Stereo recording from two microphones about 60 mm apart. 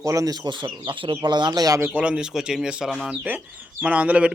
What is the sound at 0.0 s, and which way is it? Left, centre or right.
Speech, right.